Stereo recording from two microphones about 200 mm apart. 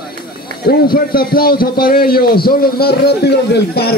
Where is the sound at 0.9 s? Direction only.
50° left (ahead or behind).